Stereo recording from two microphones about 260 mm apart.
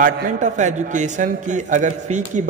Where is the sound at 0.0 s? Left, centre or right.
Right.